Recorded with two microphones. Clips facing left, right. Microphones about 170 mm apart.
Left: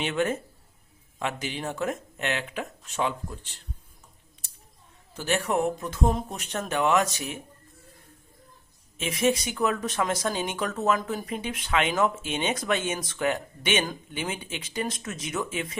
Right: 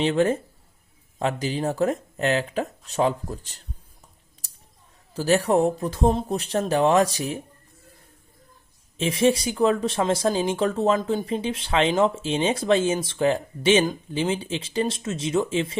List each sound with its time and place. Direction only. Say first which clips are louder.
0.0 s speech: right 6 dB; 30° right (ahead or behind)
5.1 s speech: right 6 dB; 35° right (ahead or behind)
9.0 s speech: right 5 dB; 30° right (ahead or behind)